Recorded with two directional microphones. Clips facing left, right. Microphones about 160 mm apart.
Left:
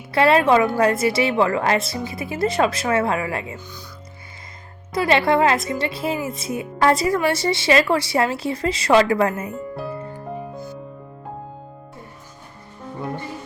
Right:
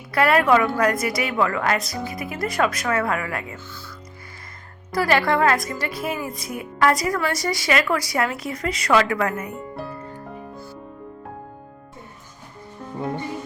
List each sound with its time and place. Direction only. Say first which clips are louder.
0.1 s a woman's voice: left 2 dB; 25° left (ahead or behind)
4.9 s a woman's voice: left 2 dB; 25° left (ahead or behind)